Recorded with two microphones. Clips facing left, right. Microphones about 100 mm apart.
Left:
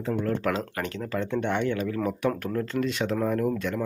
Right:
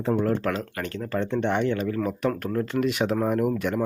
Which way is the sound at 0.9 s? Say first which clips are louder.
Right 4 dB; 5° right (ahead or behind).